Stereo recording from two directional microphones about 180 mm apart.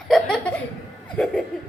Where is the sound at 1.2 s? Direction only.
5° left (ahead or behind).